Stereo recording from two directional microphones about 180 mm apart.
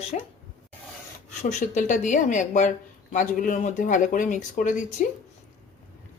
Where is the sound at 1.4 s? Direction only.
40° left (ahead or behind).